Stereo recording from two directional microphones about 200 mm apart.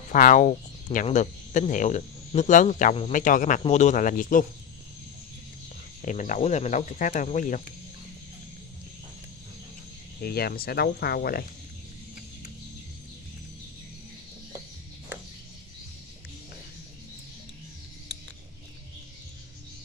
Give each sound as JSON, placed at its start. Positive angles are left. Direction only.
{"t": 0.1, "sound": "speech", "side_deg": 40}
{"t": 6.0, "sound": "speech", "side_deg": 40}
{"t": 10.2, "sound": "speech", "side_deg": 50}